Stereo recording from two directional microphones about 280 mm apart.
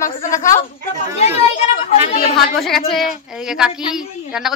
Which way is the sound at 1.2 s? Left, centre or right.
Left.